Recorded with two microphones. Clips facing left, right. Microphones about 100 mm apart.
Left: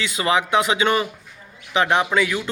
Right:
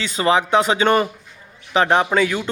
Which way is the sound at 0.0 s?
35° right (ahead or behind).